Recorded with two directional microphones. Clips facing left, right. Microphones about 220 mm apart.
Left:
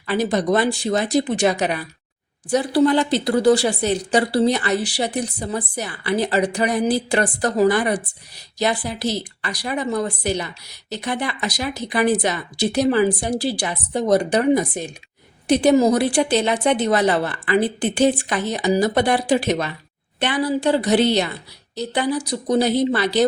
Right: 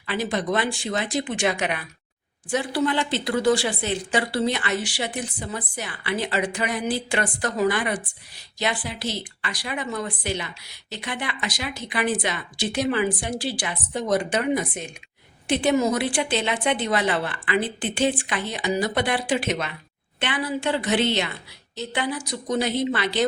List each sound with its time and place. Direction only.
0.1 s speech: 40° left (ahead or behind)